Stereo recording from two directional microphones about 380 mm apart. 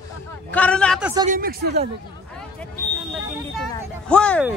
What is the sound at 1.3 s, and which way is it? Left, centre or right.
Speech, right.